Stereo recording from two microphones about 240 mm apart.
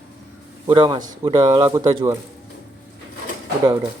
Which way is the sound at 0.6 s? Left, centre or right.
Centre.